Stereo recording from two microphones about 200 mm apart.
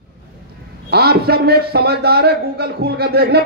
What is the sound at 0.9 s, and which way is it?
A man's voice, 55° right (ahead or behind).